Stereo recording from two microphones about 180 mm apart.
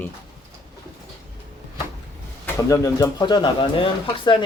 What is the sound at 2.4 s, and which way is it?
Speech, 15° left (ahead or behind).